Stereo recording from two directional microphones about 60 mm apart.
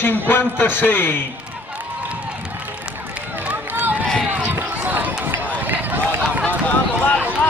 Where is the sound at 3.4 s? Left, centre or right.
Right.